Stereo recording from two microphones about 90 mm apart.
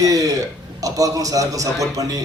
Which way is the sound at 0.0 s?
40° right (ahead or behind).